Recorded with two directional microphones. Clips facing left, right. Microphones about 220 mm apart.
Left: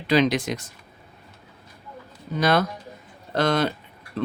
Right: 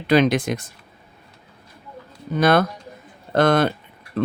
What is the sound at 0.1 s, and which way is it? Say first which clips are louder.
Speech: right 3 dB; 55° right (ahead or behind).